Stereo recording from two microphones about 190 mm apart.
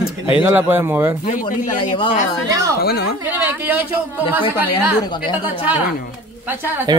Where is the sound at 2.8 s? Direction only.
60° left (ahead or behind).